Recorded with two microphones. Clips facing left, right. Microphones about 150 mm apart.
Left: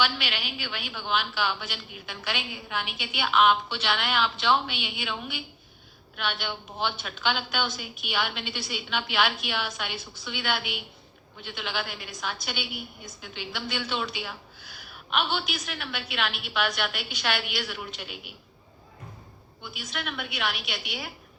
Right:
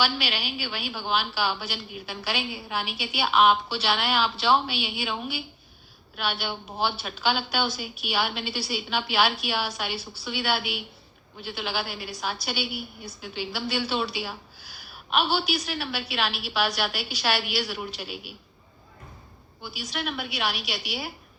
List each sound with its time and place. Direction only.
0.0 s a woman's voice: 35° right (ahead or behind)
6.8 s a woman's voice: 35° right (ahead or behind)
19.6 s a woman's voice: 30° right (ahead or behind)